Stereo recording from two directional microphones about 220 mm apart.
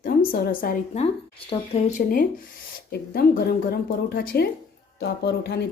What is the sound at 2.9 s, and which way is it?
Speech, 45° left (ahead or behind).